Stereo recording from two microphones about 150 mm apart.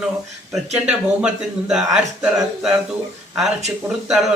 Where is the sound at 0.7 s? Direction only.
5° right (ahead or behind).